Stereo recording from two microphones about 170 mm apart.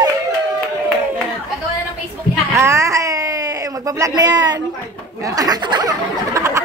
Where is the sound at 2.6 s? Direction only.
15° right (ahead or behind).